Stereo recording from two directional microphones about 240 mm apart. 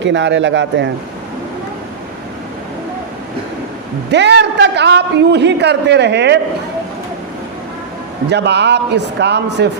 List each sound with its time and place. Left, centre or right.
0.0 s a man's voice: right
4.1 s a man's voice: right
8.3 s a man's voice: right